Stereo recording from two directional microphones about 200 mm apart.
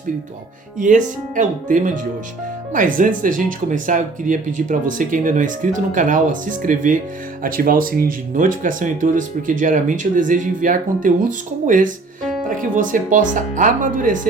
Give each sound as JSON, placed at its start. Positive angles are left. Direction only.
{"t": 0.8, "sound": "speech", "side_deg": -40}